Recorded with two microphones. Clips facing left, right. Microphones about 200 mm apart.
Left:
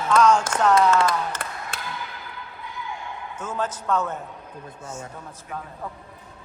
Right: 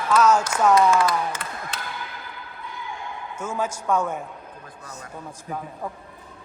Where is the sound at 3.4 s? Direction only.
10° right (ahead or behind).